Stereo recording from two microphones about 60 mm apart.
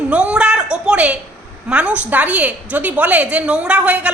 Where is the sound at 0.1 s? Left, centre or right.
Centre.